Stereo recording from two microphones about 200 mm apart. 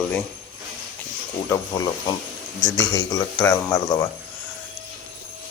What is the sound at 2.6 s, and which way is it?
Speech, 15° left (ahead or behind).